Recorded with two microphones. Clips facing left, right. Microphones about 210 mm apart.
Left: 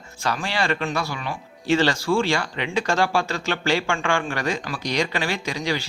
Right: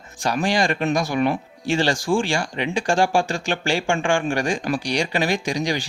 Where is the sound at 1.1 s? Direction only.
50° right (ahead or behind).